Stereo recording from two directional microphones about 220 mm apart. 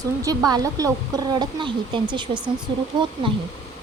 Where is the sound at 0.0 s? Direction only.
15° right (ahead or behind).